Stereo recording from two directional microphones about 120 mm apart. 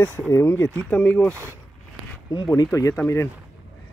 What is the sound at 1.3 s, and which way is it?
Speech, 20° right (ahead or behind).